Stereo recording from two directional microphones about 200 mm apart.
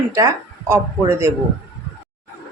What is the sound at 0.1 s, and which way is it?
A woman's voice, 15° right (ahead or behind).